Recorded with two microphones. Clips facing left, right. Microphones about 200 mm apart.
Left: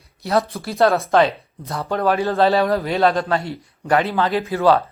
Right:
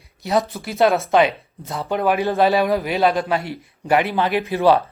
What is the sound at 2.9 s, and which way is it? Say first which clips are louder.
Speech: left 1 dB; 5° right (ahead or behind).